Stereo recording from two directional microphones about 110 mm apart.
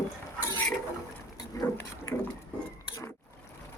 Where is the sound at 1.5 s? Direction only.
30° left (ahead or behind).